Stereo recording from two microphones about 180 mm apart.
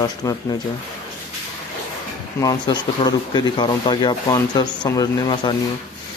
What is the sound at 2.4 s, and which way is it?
Speech, 20° left (ahead or behind).